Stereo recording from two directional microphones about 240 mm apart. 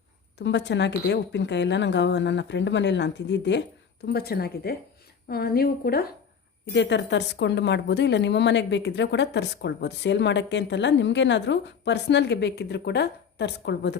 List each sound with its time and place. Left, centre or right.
0.3 s a woman's voice: left